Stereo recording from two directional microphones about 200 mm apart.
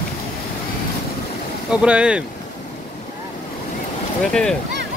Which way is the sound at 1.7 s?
5° right (ahead or behind).